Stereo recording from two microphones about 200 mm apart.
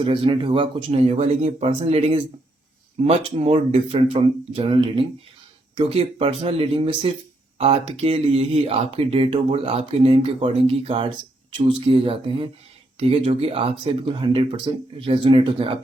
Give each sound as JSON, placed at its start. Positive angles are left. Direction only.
{"t": 0.0, "sound": "speech", "side_deg": -25}